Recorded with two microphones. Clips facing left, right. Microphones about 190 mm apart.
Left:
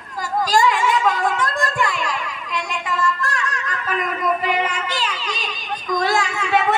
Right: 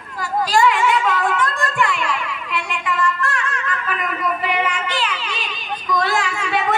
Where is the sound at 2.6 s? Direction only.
40° left (ahead or behind).